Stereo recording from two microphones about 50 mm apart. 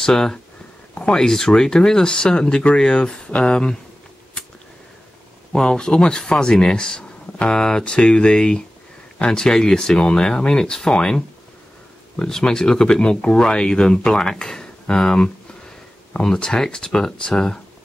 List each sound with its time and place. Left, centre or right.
0.0 s speech: centre
5.5 s speech: centre